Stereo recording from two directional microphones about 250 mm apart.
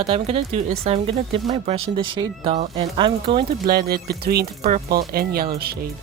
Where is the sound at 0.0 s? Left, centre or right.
Right.